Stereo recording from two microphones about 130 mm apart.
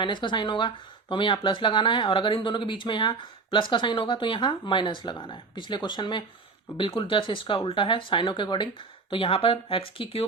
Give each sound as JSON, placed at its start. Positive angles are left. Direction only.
{"t": 0.0, "sound": "speech", "side_deg": 40}